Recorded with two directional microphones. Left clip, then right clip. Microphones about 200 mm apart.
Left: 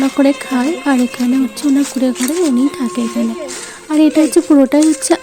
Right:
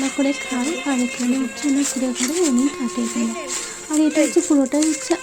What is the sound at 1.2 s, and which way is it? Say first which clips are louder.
Speech: left 6 dB; 55° left (ahead or behind).